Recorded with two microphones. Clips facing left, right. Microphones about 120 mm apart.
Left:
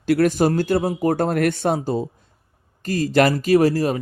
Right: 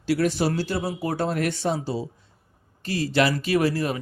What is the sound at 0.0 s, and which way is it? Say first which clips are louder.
Speech: left 5 dB; 55° left (ahead or behind).